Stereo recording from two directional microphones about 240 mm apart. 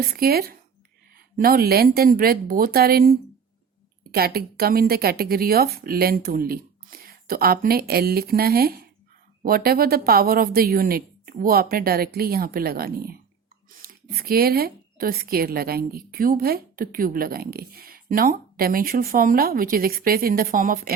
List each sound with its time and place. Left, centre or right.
0.0 s speech: right